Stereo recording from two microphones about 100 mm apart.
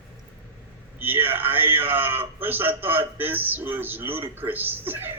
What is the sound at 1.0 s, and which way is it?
A man's voice, 20° right (ahead or behind).